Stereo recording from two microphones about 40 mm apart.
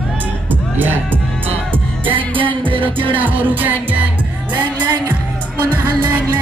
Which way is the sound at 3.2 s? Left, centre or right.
Right.